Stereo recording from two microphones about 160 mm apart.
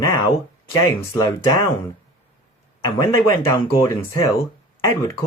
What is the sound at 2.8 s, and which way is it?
Speech, 20° left (ahead or behind).